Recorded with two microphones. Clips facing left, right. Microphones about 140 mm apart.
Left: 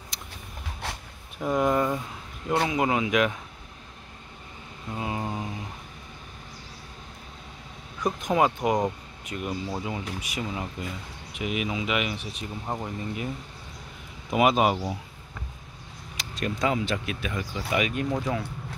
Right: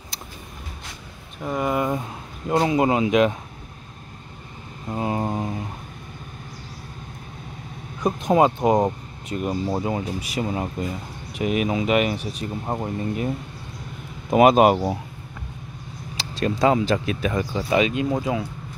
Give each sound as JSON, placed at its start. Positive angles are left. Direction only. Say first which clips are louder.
{"t": 1.4, "sound": "speech", "louder": "even", "side_deg": 0}
{"t": 1.9, "sound": "speech", "louder": "right 4 dB", "side_deg": -30}
{"t": 4.8, "sound": "mantra", "louder": "right 6 dB", "side_deg": -40}
{"t": 8.0, "sound": "speech", "louder": "right 5 dB", "side_deg": -25}
{"t": 12.6, "sound": "speech", "louder": "right 4 dB", "side_deg": -25}
{"t": 14.3, "sound": "speech", "louder": "right 7 dB", "side_deg": -45}
{"t": 16.2, "sound": "speech", "louder": "right 7 dB", "side_deg": -35}